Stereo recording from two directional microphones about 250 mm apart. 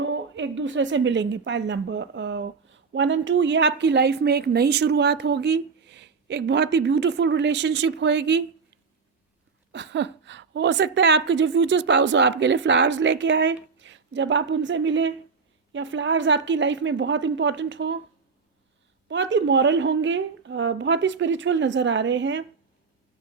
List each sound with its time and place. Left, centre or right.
0.0 s a woman's voice: right
9.7 s a woman's voice: right
19.0 s a woman's voice: right